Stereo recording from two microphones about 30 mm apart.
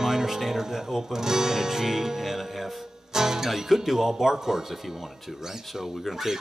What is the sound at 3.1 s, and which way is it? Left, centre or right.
Music, centre.